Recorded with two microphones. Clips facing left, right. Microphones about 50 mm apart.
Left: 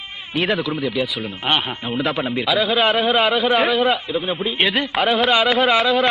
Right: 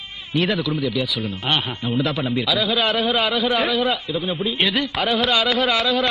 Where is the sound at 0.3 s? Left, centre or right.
Centre.